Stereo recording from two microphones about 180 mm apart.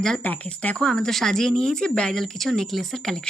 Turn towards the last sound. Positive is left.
turn(degrees=0)  # may be behind; listen again after turning